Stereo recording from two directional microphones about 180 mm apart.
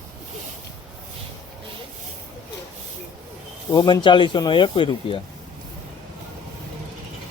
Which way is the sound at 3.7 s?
25° left (ahead or behind).